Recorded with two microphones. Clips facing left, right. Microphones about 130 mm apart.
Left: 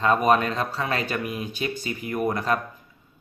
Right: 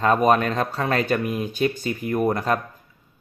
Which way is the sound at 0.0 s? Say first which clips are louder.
Right 2 dB; 40° right (ahead or behind).